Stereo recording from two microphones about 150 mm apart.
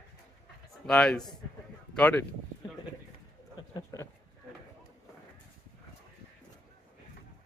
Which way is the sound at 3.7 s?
25° left (ahead or behind).